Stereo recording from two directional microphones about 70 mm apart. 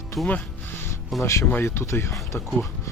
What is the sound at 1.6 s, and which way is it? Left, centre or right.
Speech, left.